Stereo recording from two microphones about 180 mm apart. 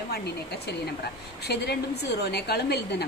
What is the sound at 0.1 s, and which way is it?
A woman's voice, 65° left (ahead or behind).